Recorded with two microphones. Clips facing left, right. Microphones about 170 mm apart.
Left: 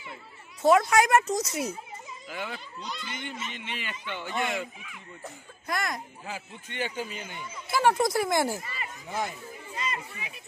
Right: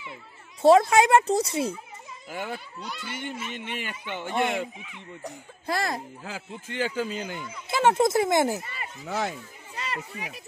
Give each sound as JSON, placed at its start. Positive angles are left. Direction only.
{"t": 0.6, "sound": "speech", "side_deg": -30}
{"t": 2.2, "sound": "a child's voice", "side_deg": -50}
{"t": 2.8, "sound": "speech", "side_deg": -10}
{"t": 3.5, "sound": "a child's voice", "side_deg": -50}
{"t": 3.9, "sound": "speech", "side_deg": -15}
{"t": 4.2, "sound": "speech", "side_deg": -55}
{"t": 4.8, "sound": "speech", "side_deg": -25}
{"t": 6.2, "sound": "a man's voice", "side_deg": -90}
{"t": 7.6, "sound": "speech", "side_deg": -20}
{"t": 8.7, "sound": "speech", "side_deg": -85}
{"t": 9.8, "sound": "speech", "side_deg": -70}